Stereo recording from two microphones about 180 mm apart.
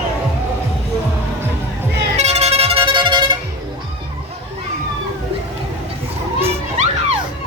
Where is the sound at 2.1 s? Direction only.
35° right (ahead or behind).